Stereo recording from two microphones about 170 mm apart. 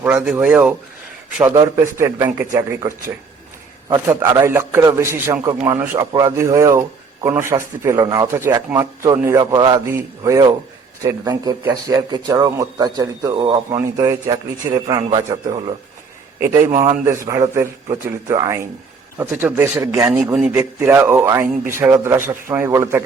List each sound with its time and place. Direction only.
0.0 s speech: 5° right (ahead or behind)
1.5 s a man's voice: 20° right (ahead or behind)